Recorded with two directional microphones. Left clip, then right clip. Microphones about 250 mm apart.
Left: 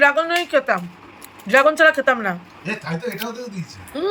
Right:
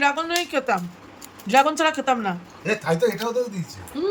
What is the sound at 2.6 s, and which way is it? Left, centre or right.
Speech, right.